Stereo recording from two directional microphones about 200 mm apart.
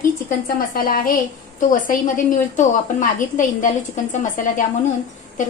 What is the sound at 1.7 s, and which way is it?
A woman's voice, 40° left (ahead or behind).